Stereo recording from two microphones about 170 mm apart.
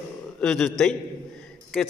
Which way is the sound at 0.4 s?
Centre (ahead or behind).